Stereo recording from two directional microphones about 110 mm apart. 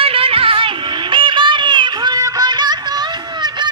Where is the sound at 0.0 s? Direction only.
60° right (ahead or behind).